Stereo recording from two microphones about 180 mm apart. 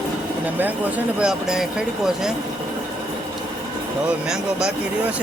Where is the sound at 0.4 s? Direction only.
10° right (ahead or behind).